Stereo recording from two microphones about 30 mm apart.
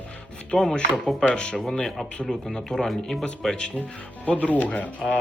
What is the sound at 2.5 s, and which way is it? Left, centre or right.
Speech, left.